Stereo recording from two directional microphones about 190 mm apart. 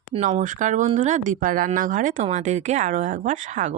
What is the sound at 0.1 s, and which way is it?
Speech, 40° right (ahead or behind).